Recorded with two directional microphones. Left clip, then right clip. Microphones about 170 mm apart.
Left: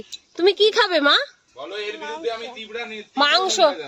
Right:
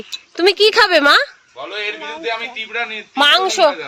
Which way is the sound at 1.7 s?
25° left (ahead or behind).